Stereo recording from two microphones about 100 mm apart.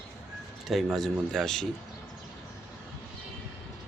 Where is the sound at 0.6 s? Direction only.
Centre (ahead or behind).